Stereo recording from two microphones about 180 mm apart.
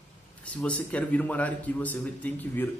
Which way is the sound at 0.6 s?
5° left (ahead or behind).